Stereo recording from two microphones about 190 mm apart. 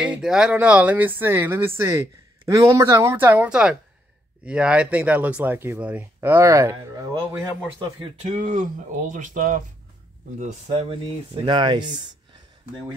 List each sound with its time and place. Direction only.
0.0 s speech: 5° right (ahead or behind)
8.0 s speech: 35° right (ahead or behind)
10.4 s speech: 30° right (ahead or behind)